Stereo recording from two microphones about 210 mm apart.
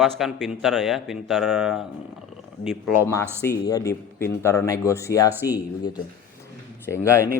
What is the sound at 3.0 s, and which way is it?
Speech, 15° left (ahead or behind).